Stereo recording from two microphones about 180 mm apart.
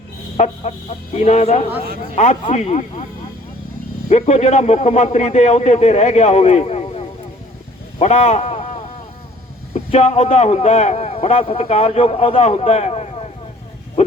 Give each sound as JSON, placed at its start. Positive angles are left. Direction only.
{"t": 0.3, "sound": "a man's voice", "side_deg": 40}
{"t": 4.1, "sound": "a man's voice", "side_deg": 40}
{"t": 7.9, "sound": "a sound", "side_deg": 40}
{"t": 9.7, "sound": "a man's voice", "side_deg": 40}